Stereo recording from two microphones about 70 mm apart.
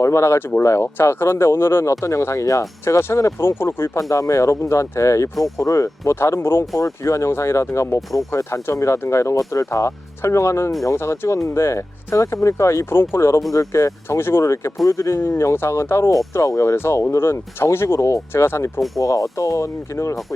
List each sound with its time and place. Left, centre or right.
0.0 s speech: left
2.8 s speech: left
4.1 s speech: left
6.7 s speech: left
13.5 s speech: left
16.7 s speech: left
18.9 s speech: left